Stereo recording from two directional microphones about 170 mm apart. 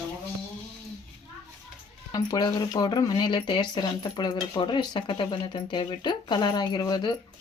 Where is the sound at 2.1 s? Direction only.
25° left (ahead or behind).